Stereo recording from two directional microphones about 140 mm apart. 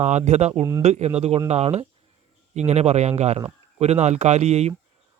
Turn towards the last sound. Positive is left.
turn(degrees=-50)  # may be behind; listen again after turning